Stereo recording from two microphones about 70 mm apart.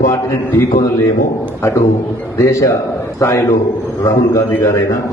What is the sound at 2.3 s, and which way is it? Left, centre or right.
A man's voice, left.